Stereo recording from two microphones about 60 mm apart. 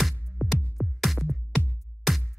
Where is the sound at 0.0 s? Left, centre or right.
Centre.